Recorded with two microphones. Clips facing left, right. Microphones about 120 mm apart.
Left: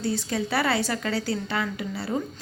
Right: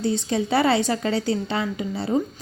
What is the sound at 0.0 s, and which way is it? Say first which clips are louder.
A woman's voice: right 4 dB; 25° right (ahead or behind).